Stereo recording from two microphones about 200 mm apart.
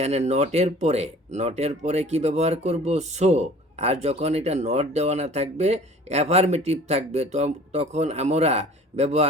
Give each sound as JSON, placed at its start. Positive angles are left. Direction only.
{"t": 0.0, "sound": "speech", "side_deg": -35}